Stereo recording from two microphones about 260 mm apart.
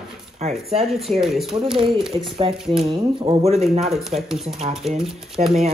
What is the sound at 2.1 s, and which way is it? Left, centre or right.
A man's voice, right.